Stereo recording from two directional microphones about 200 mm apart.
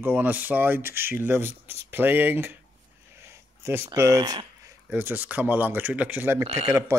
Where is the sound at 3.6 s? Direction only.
15° right (ahead or behind).